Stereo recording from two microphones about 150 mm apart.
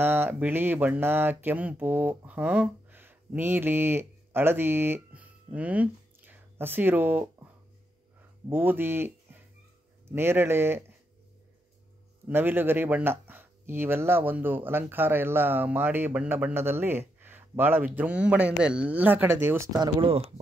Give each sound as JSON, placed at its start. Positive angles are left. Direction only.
{"t": 0.0, "sound": "speech", "side_deg": -15}
{"t": 8.5, "sound": "speech", "side_deg": -15}
{"t": 12.3, "sound": "speech", "side_deg": -15}
{"t": 19.8, "sound": "speech", "side_deg": -35}